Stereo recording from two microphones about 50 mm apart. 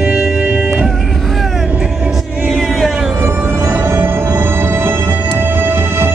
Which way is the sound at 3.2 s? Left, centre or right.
Right.